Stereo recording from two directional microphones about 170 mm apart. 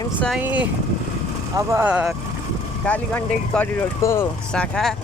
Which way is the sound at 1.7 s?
10° right (ahead or behind).